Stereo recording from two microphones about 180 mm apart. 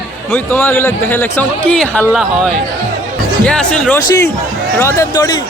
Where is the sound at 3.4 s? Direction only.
5° left (ahead or behind).